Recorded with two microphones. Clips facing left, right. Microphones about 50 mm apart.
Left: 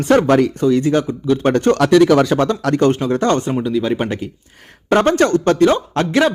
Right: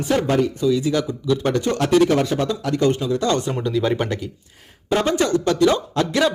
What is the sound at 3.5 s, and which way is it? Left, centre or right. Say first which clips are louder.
Speech: left 3 dB; centre.